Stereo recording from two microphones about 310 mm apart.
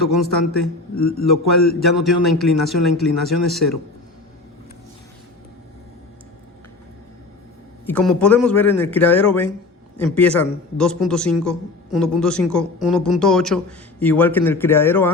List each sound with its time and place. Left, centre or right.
0.9 s speech: left
1.3 s speech: centre
7.9 s speech: centre